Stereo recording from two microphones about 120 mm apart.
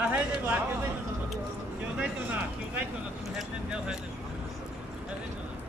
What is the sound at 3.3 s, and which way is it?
Speech, 5° right (ahead or behind).